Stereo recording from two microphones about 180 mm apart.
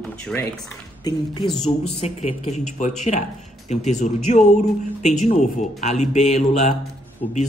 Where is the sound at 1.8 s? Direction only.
35° left (ahead or behind).